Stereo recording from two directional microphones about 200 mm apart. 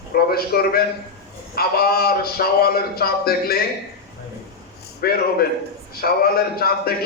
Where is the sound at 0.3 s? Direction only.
50° left (ahead or behind).